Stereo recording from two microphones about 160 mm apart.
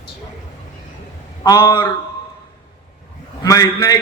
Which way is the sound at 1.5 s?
25° left (ahead or behind).